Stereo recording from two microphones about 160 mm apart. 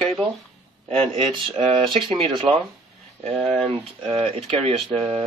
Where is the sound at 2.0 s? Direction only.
35° right (ahead or behind).